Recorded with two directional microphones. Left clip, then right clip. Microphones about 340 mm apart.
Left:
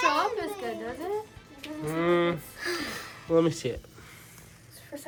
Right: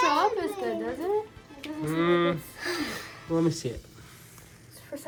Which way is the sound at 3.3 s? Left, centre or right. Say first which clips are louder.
Left 3 dB; left.